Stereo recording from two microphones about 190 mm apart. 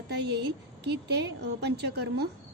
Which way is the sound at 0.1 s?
60° right (ahead or behind).